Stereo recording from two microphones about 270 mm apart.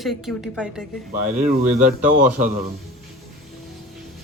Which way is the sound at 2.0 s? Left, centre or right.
Right.